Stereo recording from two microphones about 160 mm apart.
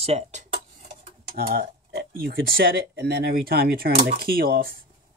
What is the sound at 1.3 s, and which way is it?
Speech, 70° right (ahead or behind).